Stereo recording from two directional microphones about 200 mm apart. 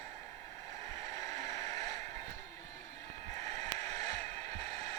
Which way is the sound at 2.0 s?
35° right (ahead or behind).